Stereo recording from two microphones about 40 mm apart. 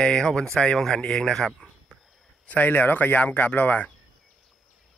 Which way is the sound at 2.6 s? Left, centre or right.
Left.